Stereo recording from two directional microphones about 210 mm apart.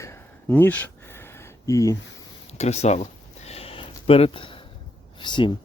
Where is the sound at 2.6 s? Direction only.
30° left (ahead or behind).